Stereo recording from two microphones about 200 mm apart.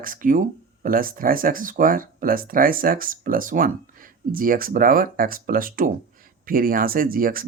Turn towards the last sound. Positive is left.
turn(degrees=-45)  # may be behind; listen again after turning